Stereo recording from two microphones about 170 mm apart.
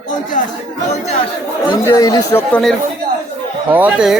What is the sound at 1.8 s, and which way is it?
Speech, 20° left (ahead or behind).